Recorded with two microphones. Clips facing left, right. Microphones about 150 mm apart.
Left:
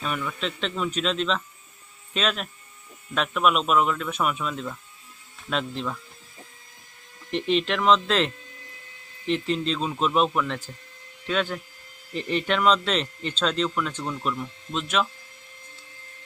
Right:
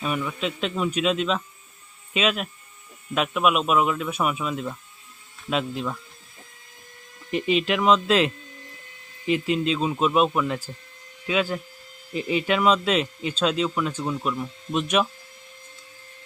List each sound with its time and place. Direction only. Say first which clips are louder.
0.0 s speech: right 3 dB; 10° right (ahead or behind)
7.3 s speech: right 1 dB; 5° right (ahead or behind)
14.8 s speech: right 3 dB; 15° right (ahead or behind)